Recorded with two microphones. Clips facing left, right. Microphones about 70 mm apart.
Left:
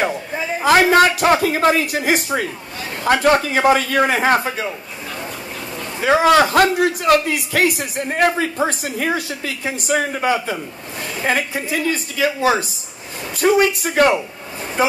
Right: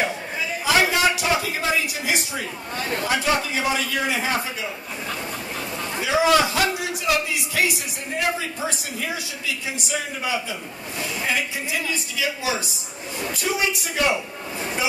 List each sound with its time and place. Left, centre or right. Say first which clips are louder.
0.6 s a man's voice: left 8 dB; left
5.9 s a man's voice: left 6 dB; left